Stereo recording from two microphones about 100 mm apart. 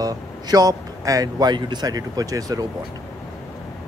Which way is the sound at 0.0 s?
40° right (ahead or behind).